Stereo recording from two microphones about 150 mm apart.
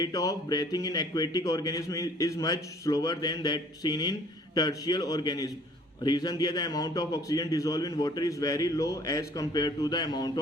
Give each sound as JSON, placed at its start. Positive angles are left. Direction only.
{"t": 0.0, "sound": "a man's voice", "side_deg": 25}